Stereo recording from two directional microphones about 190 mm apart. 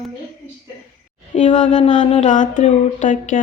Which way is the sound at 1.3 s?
40° left (ahead or behind).